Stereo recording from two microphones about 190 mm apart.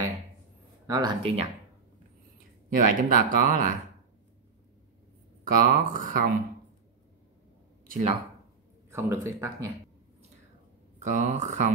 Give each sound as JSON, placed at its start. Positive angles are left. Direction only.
{"t": 0.8, "sound": "speech", "side_deg": -20}
{"t": 2.7, "sound": "speech", "side_deg": -45}
{"t": 5.4, "sound": "speech", "side_deg": -45}
{"t": 7.8, "sound": "a sound", "side_deg": -45}
{"t": 8.9, "sound": "speech", "side_deg": -15}
{"t": 11.0, "sound": "speech", "side_deg": -40}